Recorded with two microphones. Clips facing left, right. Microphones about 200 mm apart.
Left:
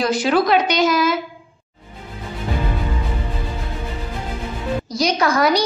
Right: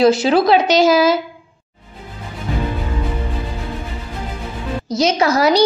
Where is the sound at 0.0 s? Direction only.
25° right (ahead or behind).